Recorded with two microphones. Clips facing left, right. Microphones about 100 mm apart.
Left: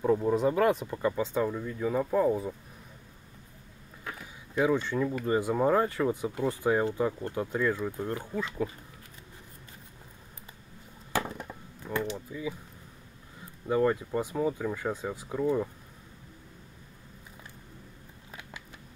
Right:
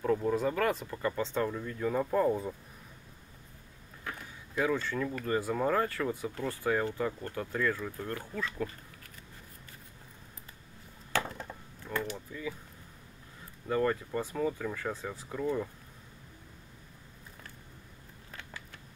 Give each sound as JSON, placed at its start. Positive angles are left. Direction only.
{"t": 0.0, "sound": "speech", "side_deg": 15}
{"t": 4.0, "sound": "speech", "side_deg": 15}
{"t": 11.1, "sound": "chop", "side_deg": 15}
{"t": 13.7, "sound": "speech", "side_deg": 15}